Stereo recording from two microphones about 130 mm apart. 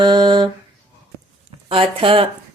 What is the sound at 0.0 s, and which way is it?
Speech, 35° right (ahead or behind).